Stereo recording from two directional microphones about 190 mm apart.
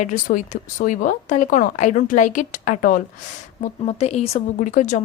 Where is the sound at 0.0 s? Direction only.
45° left (ahead or behind).